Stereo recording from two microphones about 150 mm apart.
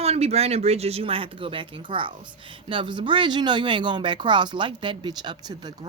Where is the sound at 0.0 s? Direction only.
45° right (ahead or behind).